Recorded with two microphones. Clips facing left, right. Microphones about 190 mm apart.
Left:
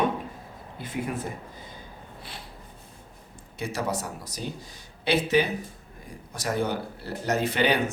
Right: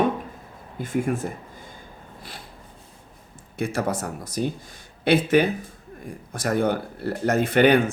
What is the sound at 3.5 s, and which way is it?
Speech, 55° right (ahead or behind).